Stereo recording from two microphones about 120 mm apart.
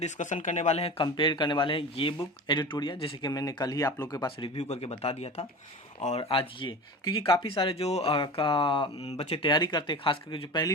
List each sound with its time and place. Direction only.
0.0 s speech: 90° left; by 1.0 s 55° left (ahead or behind)
1.0 s speech: 40° left (ahead or behind)
4.5 s speech: 60° left (ahead or behind)
6.0 s speech: 70° left (ahead or behind)
6.2 s speech: 50° left (ahead or behind)
9.0 s speech: 60° left (ahead or behind); by 10.7 s 40° left (ahead or behind)